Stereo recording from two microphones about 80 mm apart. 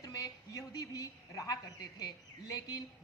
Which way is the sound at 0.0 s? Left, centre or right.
Left.